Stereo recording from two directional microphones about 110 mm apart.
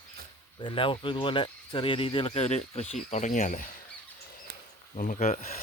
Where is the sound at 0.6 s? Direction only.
50° left (ahead or behind); by 3.2 s 90° left.